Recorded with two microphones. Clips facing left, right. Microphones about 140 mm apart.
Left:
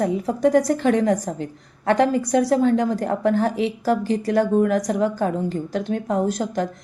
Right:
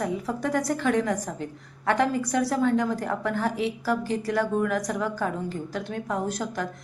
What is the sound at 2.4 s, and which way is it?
Speech, 25° left (ahead or behind).